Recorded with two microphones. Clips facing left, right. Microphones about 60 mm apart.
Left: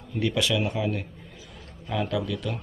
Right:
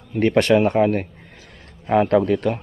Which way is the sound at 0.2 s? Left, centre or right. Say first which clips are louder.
Right 10 dB; right.